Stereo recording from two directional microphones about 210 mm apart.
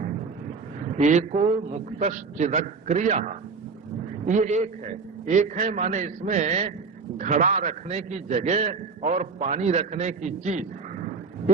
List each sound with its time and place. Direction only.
0.9 s a man's voice: 35° right (ahead or behind)